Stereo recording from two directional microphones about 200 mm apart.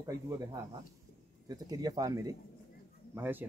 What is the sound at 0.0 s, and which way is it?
Speech, 15° right (ahead or behind).